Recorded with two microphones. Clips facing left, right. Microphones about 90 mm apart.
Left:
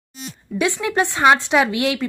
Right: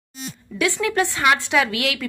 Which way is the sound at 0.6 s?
20° left (ahead or behind).